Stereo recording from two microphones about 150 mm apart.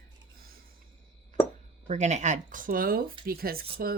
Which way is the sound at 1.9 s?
50° right (ahead or behind).